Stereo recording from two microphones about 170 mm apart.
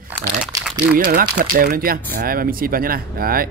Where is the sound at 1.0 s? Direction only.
55° right (ahead or behind).